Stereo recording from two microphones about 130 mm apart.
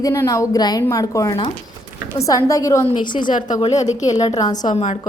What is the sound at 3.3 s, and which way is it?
Speech, 80° left.